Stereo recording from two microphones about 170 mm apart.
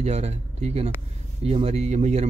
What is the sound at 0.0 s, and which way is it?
Speech, 40° right (ahead or behind).